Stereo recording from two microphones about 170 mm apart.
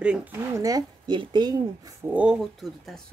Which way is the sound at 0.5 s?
20° right (ahead or behind).